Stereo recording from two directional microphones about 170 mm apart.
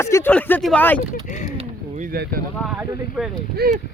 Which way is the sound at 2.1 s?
65° right (ahead or behind).